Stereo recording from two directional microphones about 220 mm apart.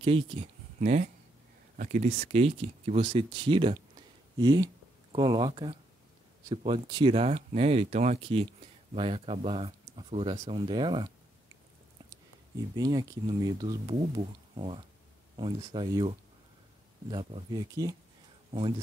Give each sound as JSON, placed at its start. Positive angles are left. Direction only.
{"t": 0.0, "sound": "speech", "side_deg": -25}
{"t": 12.7, "sound": "speech", "side_deg": -15}